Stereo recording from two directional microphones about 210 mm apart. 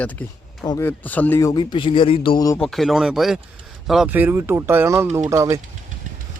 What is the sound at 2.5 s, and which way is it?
Speech, centre (ahead or behind).